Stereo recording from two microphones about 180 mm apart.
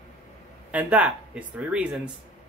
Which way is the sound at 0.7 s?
5° right (ahead or behind).